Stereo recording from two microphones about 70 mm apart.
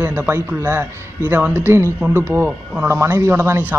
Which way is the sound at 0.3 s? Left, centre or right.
Right.